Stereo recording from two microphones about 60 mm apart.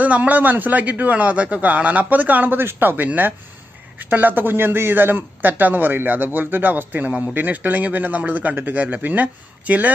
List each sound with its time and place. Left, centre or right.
0.0 s a man's voice: right